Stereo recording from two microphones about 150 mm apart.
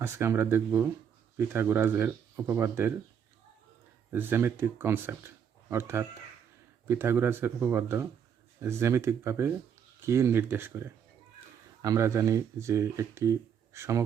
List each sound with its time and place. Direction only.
0.0 s speech: 15° right (ahead or behind)
4.1 s speech: 15° right (ahead or behind)